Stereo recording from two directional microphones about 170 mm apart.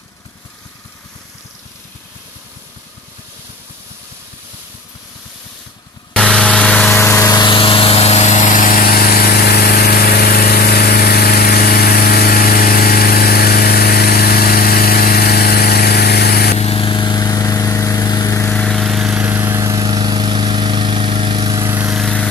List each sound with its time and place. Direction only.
6.1 s vehicle: 5° left (ahead or behind)
7.0 s vehicle: 15° left (ahead or behind); by 16.5 s 65° left (ahead or behind)
16.5 s vehicle: 35° left (ahead or behind); by 21.9 s 15° right (ahead or behind)
21.9 s vehicle: 5° left (ahead or behind)